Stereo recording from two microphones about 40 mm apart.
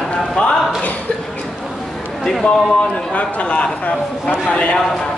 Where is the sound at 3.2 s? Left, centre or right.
Left.